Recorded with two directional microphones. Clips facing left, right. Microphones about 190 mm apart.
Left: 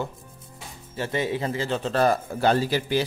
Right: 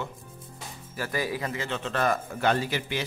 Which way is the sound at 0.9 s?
25° left (ahead or behind).